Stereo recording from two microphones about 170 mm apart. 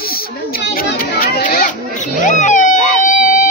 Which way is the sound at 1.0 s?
60° left (ahead or behind).